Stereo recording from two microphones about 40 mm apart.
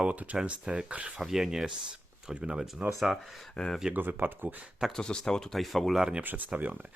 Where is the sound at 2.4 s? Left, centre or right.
Right.